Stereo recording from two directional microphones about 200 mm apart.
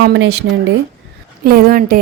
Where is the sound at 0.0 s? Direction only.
55° right (ahead or behind).